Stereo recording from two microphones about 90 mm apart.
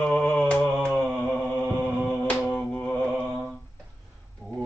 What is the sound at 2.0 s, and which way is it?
Mantra, 20° left (ahead or behind).